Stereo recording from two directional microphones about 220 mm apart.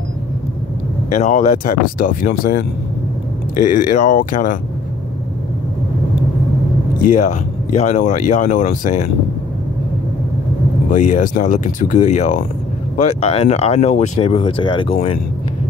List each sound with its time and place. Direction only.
1.1 s speech: 35° left (ahead or behind)
3.8 s speech: 35° left (ahead or behind)
7.1 s speech: 35° left (ahead or behind)
10.9 s speech: 35° left (ahead or behind)